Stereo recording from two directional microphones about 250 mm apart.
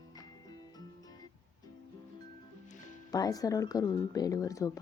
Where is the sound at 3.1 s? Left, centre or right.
Centre.